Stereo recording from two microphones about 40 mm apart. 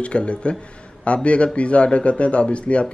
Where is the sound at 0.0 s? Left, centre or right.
Left.